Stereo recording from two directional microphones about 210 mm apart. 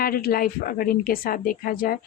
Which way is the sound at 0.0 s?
45° left (ahead or behind).